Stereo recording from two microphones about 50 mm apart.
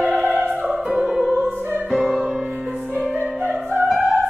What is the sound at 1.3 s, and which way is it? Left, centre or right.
Music, centre.